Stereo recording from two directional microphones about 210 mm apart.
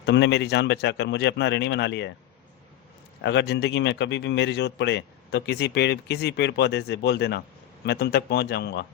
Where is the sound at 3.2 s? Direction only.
55° left (ahead or behind).